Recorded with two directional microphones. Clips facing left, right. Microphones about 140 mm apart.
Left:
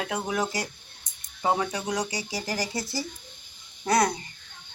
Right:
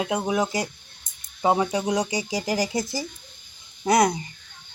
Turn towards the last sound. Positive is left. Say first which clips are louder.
# right 4 dB
turn(degrees=-15)  # may be behind; listen again after turning